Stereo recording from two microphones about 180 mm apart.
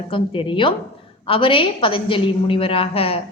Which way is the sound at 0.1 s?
30° left (ahead or behind).